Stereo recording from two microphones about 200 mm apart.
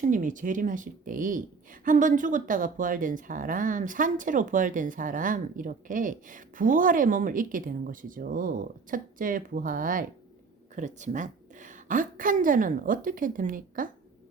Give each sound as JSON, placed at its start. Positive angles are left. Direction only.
{"t": 0.0, "sound": "a woman's voice", "side_deg": -40}